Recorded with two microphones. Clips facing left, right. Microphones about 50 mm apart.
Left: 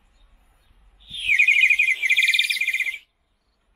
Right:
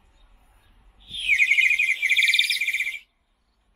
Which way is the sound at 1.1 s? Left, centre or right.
Centre.